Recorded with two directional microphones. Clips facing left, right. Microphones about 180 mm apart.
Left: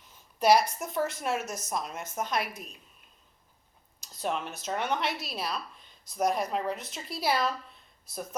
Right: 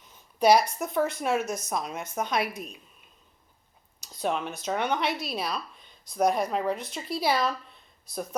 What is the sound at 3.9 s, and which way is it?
A woman's voice, centre (ahead or behind).